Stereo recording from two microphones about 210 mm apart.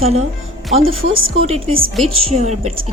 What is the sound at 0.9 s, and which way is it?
Speech, 70° right (ahead or behind).